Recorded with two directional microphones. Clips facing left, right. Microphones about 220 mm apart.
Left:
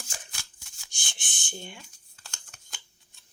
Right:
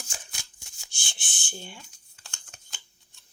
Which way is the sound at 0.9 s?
20° left (ahead or behind).